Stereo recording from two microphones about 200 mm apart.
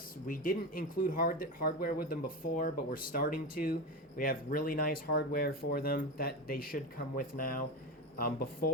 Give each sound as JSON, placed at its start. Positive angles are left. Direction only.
{"t": 0.3, "sound": "speech", "side_deg": 45}